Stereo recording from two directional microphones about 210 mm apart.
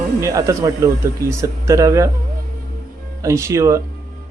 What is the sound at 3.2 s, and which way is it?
Speech, 15° right (ahead or behind).